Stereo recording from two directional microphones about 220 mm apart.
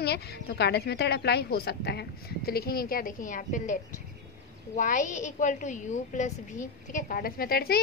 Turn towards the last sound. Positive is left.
turn(degrees=45)  # may be behind; listen again after turning